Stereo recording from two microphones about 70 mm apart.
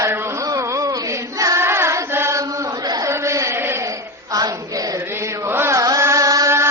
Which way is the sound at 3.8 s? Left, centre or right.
Right.